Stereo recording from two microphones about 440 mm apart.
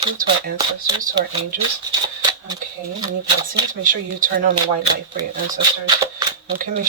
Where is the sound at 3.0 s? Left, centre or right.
Centre.